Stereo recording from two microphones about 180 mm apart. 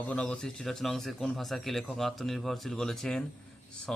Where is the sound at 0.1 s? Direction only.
5° left (ahead or behind).